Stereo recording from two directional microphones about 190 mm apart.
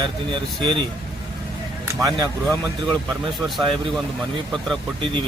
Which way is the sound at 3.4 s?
Centre (ahead or behind).